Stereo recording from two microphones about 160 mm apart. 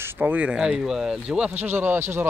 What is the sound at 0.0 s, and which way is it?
A man's voice, 15° right (ahead or behind).